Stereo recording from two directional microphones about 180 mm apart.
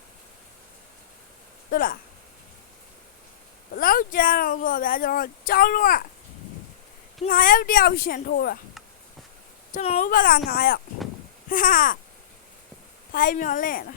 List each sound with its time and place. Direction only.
1.7 s speech: 50° left (ahead or behind)
3.8 s speech: 50° left (ahead or behind)
7.3 s speech: 50° left (ahead or behind)
9.7 s speech: 40° left (ahead or behind)
10.1 s speech: 50° left (ahead or behind)
13.1 s speech: 50° left (ahead or behind)